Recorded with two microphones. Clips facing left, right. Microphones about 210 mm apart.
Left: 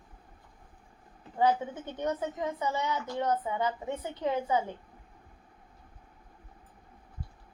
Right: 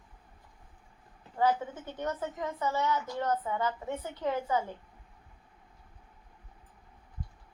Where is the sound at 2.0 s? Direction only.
15° left (ahead or behind).